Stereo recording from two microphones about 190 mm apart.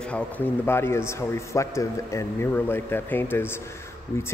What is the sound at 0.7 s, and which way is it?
Speech, 15° left (ahead or behind).